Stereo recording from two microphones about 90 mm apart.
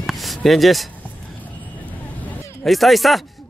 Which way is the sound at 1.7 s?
20° left (ahead or behind).